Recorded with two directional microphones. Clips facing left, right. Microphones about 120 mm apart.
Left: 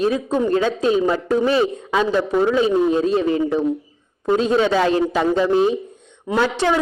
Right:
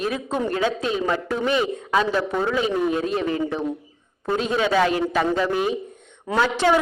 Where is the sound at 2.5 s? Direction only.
25° left (ahead or behind).